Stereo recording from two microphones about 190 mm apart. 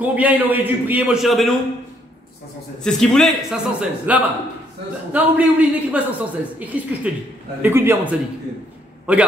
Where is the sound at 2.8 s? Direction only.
5° left (ahead or behind).